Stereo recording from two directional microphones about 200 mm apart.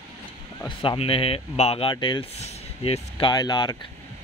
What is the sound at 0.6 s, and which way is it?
Speech, 25° left (ahead or behind).